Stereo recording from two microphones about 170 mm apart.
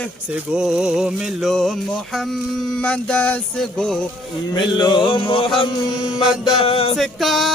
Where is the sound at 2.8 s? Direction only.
10° left (ahead or behind).